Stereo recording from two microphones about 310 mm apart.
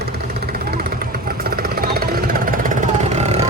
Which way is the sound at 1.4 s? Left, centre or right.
Right.